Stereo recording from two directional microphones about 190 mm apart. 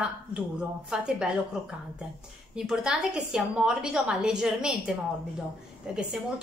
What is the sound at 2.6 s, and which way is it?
A woman's voice, 5° right (ahead or behind).